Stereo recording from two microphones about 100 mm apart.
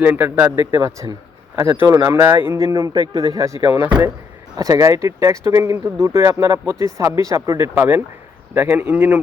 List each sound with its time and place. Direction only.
0.0 s speech: 20° right (ahead or behind)
7.8 s speech: 20° right (ahead or behind)